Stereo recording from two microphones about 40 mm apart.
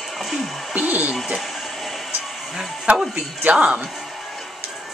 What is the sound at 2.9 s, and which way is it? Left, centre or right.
Speech, right.